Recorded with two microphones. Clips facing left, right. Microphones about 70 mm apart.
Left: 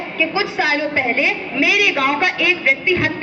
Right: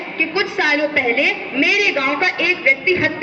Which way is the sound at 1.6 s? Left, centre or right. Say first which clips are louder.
Left 1 dB; right.